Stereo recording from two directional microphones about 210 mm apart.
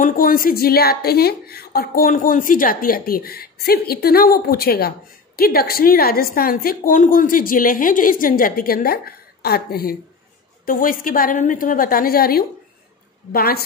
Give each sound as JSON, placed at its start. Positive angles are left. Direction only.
{"t": 0.0, "sound": "a woman's voice", "side_deg": 40}